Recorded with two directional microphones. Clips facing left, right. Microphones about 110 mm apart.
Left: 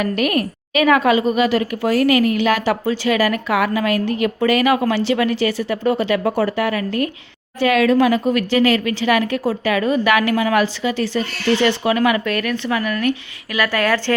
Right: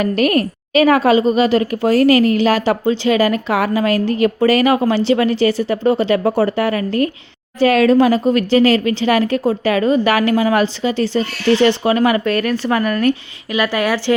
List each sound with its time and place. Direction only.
0.0 s a woman's voice: 35° right (ahead or behind)
13.5 s speech: 20° right (ahead or behind)